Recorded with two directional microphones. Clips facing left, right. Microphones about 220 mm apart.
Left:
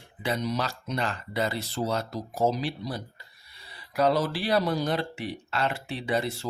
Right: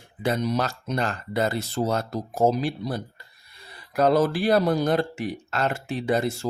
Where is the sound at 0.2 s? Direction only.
50° right (ahead or behind).